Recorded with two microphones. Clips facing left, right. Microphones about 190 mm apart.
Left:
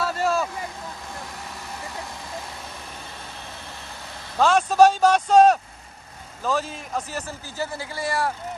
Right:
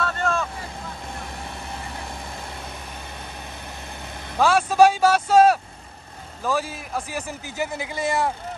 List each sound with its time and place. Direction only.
0.0 s vehicle: 5° left (ahead or behind)
4.4 s a man's voice: 10° right (ahead or behind)